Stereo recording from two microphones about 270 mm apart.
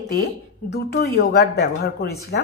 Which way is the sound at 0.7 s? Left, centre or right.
Left.